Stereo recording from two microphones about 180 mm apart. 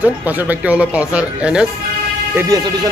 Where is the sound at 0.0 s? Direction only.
10° right (ahead or behind).